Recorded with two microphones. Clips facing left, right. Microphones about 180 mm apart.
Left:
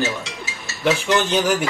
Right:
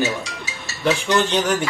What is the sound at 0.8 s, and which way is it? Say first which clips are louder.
Speech: even; 5° left (ahead or behind).